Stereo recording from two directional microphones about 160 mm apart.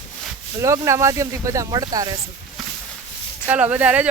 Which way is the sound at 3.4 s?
10° right (ahead or behind).